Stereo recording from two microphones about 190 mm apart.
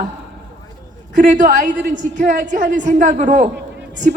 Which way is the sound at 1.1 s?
40° right (ahead or behind).